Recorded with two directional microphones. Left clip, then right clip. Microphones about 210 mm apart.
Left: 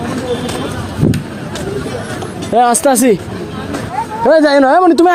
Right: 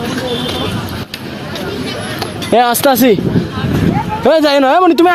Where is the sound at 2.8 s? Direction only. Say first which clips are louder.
Right 1 dB; 10° right (ahead or behind).